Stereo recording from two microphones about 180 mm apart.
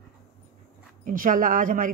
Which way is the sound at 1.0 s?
50° right (ahead or behind).